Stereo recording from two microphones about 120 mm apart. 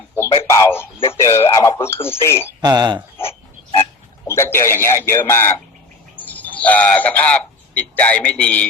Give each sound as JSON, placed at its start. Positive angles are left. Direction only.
{"t": 0.2, "sound": "a sound", "side_deg": 20}
{"t": 1.0, "sound": "speech", "side_deg": 25}
{"t": 2.6, "sound": "speech", "side_deg": -35}
{"t": 4.3, "sound": "speech", "side_deg": 20}